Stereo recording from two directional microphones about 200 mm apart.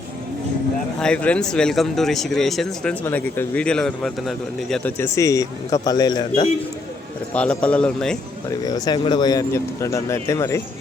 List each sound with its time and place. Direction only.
0.9 s speech: 5° left (ahead or behind); by 6.4 s 20° left (ahead or behind)
7.6 s speech: 5° left (ahead or behind)
8.4 s a man's voice: 20° left (ahead or behind)